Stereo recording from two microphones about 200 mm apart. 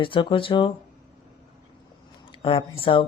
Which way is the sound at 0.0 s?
25° left (ahead or behind).